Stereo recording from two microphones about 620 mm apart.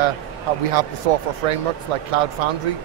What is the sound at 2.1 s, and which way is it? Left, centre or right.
Speech, right.